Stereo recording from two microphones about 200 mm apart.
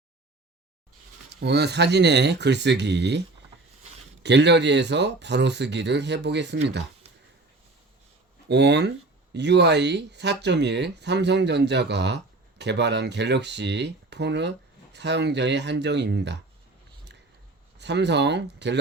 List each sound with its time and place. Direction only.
1.3 s speech: 55° right (ahead or behind)
8.4 s speech: 60° right (ahead or behind)
17.7 s speech: 60° right (ahead or behind)